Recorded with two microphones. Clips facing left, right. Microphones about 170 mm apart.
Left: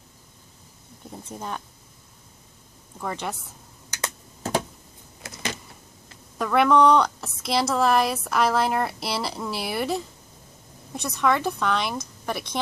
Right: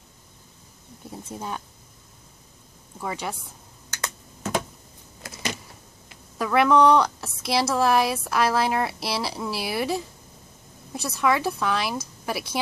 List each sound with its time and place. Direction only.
1.1 s speech: 5° right (ahead or behind)
3.0 s a woman's voice: 5° right (ahead or behind)
4.4 s a sound: 35° left (ahead or behind)
6.3 s a woman's voice: centre (ahead or behind)